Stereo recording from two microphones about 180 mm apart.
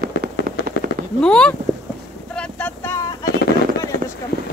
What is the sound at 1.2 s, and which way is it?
Speech, 5° left (ahead or behind).